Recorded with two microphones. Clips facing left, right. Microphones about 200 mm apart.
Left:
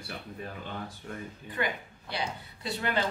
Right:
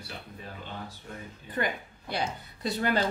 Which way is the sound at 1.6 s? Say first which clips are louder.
Right 2 dB; 45° right (ahead or behind).